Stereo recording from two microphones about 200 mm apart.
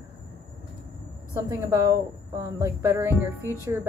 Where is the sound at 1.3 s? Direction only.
15° right (ahead or behind).